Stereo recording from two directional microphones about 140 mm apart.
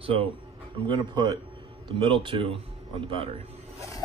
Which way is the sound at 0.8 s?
30° right (ahead or behind).